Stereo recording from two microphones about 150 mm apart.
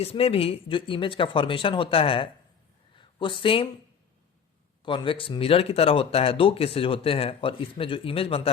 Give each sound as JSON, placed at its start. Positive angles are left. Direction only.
{"t": 0.0, "sound": "speech", "side_deg": 40}
{"t": 2.9, "sound": "a sound", "side_deg": 35}
{"t": 4.9, "sound": "speech", "side_deg": 35}